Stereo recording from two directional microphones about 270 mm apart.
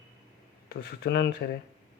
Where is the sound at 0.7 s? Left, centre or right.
Left.